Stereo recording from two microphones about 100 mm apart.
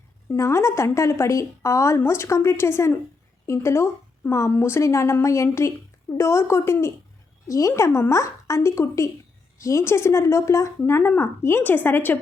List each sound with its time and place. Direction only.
0.3 s a woman's voice: 25° left (ahead or behind)